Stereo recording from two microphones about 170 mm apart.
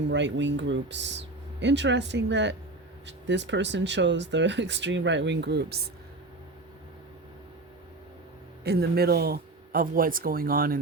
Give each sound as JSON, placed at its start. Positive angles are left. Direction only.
{"t": 0.1, "sound": "speech", "side_deg": -90}
{"t": 8.6, "sound": "speech", "side_deg": -65}